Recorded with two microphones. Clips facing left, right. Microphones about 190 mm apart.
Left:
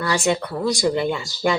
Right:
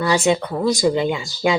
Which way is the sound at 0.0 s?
20° right (ahead or behind).